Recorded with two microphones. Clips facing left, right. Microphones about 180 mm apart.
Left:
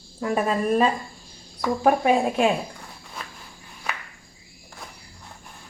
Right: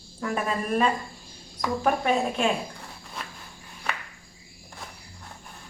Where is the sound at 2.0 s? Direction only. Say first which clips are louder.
Left 4 dB; 15° left (ahead or behind).